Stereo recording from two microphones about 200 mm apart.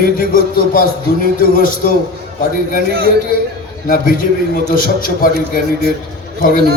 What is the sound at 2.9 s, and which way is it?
Speech, 50° right (ahead or behind).